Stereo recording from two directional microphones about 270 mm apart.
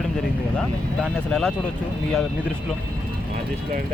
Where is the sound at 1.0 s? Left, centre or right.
Centre.